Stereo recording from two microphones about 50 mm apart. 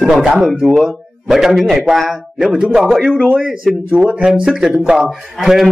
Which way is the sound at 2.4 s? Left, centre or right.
Centre.